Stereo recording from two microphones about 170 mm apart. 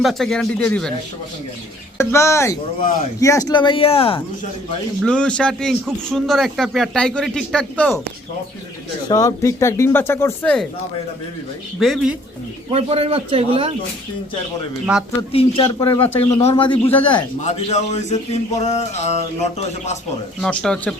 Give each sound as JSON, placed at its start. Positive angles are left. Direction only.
{"t": 0.0, "sound": "a man's voice", "side_deg": 0}
{"t": 2.0, "sound": "speech", "side_deg": 15}
{"t": 5.0, "sound": "a man's voice", "side_deg": 5}
{"t": 9.0, "sound": "speech", "side_deg": 20}
{"t": 11.8, "sound": "a man's voice", "side_deg": 0}
{"t": 12.7, "sound": "a man's voice", "side_deg": -35}
{"t": 14.9, "sound": "speech", "side_deg": -5}
{"t": 15.3, "sound": "a sound", "side_deg": 35}
{"t": 16.8, "sound": "speech", "side_deg": 10}
{"t": 17.4, "sound": "a sound", "side_deg": 40}
{"t": 20.4, "sound": "a man's voice", "side_deg": 5}